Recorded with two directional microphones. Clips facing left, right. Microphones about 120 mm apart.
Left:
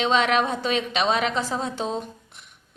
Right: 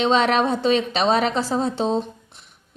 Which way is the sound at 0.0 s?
35° right (ahead or behind).